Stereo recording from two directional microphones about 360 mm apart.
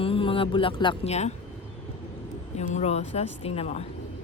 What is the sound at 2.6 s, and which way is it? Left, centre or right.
Speech, centre.